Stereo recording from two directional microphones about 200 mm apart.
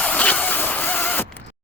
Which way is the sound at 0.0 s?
5° left (ahead or behind).